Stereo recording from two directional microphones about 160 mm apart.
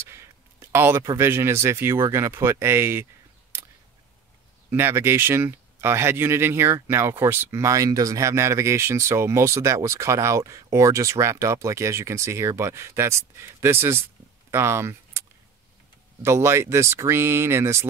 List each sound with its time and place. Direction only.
0.1 s speech: 15° right (ahead or behind)
4.6 s speech: 15° right (ahead or behind)